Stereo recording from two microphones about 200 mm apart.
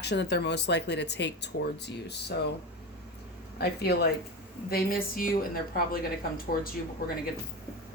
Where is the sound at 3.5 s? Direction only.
55° left (ahead or behind).